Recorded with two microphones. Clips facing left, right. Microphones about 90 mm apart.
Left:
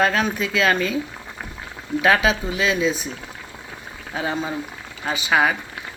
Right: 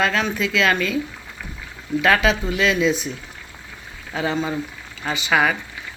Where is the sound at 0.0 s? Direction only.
40° left (ahead or behind).